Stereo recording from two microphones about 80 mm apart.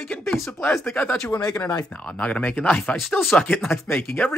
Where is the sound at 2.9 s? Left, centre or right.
Centre.